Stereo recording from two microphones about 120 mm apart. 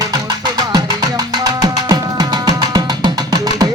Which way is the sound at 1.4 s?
30° right (ahead or behind).